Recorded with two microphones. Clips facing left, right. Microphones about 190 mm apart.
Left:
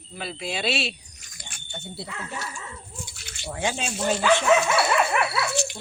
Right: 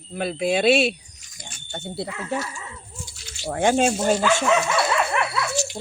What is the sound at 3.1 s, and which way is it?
Drip, 60° left (ahead or behind).